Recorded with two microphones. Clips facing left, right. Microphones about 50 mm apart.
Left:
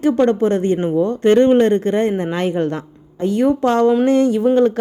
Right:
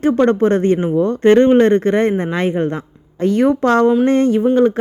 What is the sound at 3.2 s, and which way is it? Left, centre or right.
Speech, right.